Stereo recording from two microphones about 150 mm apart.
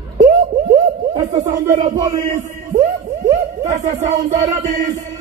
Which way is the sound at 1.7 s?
25° right (ahead or behind).